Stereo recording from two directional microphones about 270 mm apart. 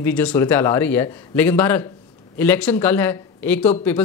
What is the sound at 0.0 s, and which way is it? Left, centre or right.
Speech, centre.